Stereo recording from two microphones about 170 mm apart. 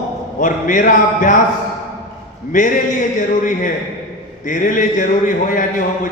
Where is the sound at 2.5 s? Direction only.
50° left (ahead or behind).